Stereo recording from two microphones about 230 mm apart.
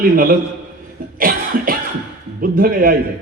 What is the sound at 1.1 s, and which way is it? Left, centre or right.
Cough, right.